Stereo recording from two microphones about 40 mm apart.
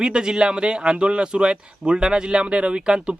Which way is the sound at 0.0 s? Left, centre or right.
Centre.